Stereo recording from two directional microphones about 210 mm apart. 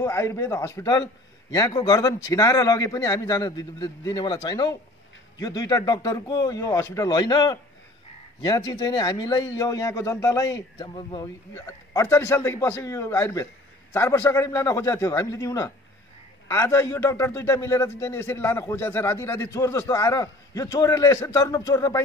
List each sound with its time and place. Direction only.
0.0 s a man's voice: 10° left (ahead or behind)